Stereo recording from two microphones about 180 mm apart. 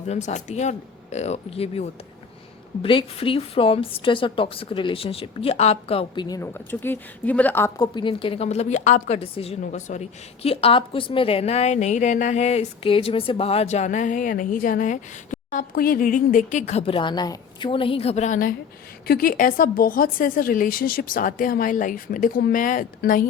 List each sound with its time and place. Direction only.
0.1 s a woman's voice: 40° left (ahead or behind); by 7.9 s 10° left (ahead or behind)
7.9 s a woman's voice: 30° left (ahead or behind)
16.8 s a woman's voice: 25° left (ahead or behind); by 23.2 s 50° left (ahead or behind)